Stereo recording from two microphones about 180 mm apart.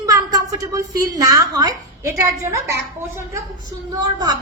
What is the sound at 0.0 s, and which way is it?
A woman's voice, 20° right (ahead or behind).